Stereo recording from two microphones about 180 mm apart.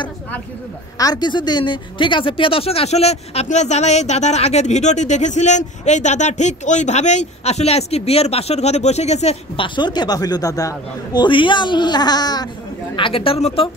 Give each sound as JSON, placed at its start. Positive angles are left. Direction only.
{"t": 0.9, "sound": "speech", "side_deg": 20}